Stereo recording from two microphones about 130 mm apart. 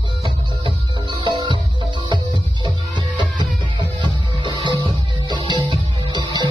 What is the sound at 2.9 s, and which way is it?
Music, 35° right (ahead or behind).